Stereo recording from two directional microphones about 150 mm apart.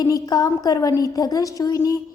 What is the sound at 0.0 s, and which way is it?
A woman's voice, 25° left (ahead or behind).